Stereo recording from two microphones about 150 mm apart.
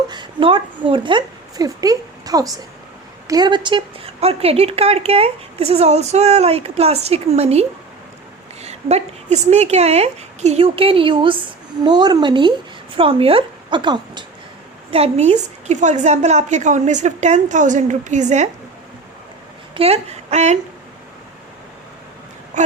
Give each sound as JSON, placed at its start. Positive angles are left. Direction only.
{"t": 0.1, "sound": "a woman's voice", "side_deg": -30}
{"t": 14.8, "sound": "speech", "side_deg": -40}
{"t": 19.7, "sound": "speech", "side_deg": -40}
{"t": 22.5, "sound": "a sound", "side_deg": -55}